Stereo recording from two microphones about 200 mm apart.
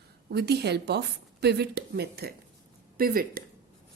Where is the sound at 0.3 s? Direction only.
55° right (ahead or behind).